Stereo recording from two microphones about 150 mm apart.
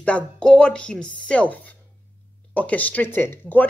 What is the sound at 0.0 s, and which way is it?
Speech, 5° left (ahead or behind).